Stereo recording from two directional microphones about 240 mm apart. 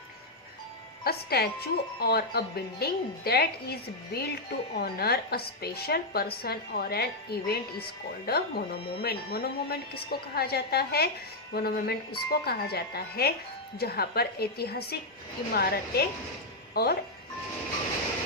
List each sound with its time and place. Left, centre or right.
1.0 s speech: left